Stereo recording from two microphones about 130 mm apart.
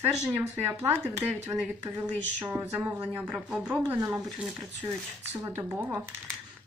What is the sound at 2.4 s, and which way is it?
Speech, 15° right (ahead or behind).